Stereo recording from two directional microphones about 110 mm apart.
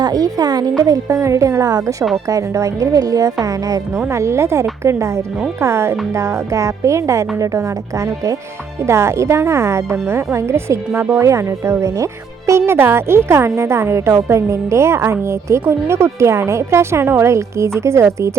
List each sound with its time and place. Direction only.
0.0 s a woman's voice: 35° right (ahead or behind)